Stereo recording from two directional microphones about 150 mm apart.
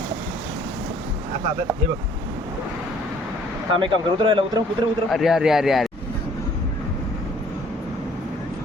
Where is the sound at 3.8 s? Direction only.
30° right (ahead or behind).